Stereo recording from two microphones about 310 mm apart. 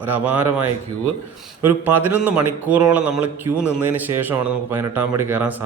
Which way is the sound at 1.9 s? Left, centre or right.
Centre.